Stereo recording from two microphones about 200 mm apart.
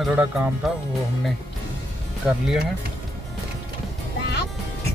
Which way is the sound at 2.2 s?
5° right (ahead or behind).